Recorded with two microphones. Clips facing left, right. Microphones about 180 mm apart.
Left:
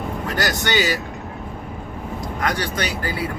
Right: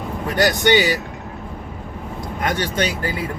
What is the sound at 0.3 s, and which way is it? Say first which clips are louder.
Speech: right 6 dB; 20° right (ahead or behind).